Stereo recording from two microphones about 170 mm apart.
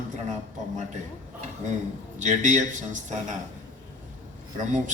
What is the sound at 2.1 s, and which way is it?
A man's voice, 45° right (ahead or behind).